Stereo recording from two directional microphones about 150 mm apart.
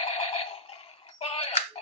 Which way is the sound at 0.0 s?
45° left (ahead or behind).